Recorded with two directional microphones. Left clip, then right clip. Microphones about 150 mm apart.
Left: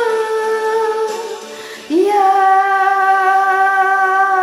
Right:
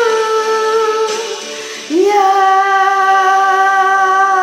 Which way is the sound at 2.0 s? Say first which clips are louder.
Right 2 dB; 25° left (ahead or behind).